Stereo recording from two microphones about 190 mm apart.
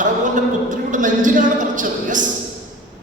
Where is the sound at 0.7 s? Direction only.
40° right (ahead or behind).